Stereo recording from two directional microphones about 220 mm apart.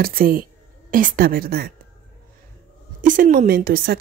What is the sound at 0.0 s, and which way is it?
A woman's voice, 40° right (ahead or behind).